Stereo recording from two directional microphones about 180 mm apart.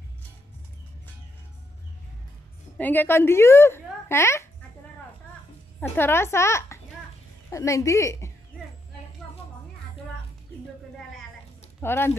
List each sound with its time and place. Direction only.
2.8 s a woman's voice: 10° left (ahead or behind)
5.8 s a woman's voice: 10° left (ahead or behind)
11.8 s a woman's voice: 10° left (ahead or behind)